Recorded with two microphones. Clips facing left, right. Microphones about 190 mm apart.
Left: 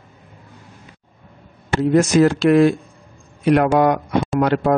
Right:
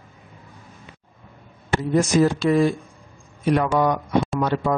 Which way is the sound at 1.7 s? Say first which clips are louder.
Left 4 dB; 75° left (ahead or behind).